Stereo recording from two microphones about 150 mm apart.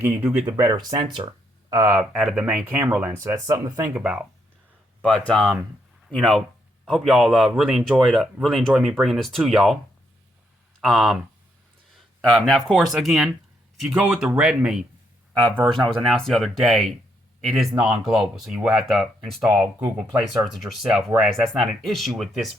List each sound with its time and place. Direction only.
0.0 s speech: 15° right (ahead or behind)
0.5 s speech: 25° right (ahead or behind)
2.0 s speech: 5° right (ahead or behind); by 3.8 s 20° right (ahead or behind)
3.9 s speech: 5° right (ahead or behind)
5.0 s a man's voice: 5° left (ahead or behind)
10.8 s a man's voice: centre (ahead or behind)
16.0 s a man's voice: centre (ahead or behind)